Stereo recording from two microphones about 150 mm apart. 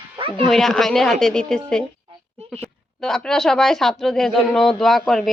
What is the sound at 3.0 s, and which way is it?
A woman's voice, 5° left (ahead or behind).